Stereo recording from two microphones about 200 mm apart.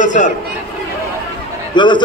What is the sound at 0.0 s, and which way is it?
Speech, 40° left (ahead or behind).